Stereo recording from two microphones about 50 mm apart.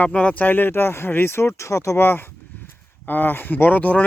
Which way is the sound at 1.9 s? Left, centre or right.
Left.